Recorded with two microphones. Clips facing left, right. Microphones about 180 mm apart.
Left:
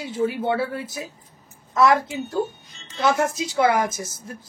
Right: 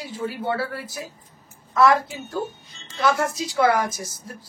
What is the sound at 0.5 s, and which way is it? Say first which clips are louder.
A woman's voice: left 3 dB; 20° left (ahead or behind).